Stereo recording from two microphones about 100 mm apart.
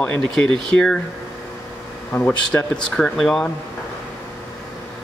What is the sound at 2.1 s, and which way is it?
Speech, 20° left (ahead or behind).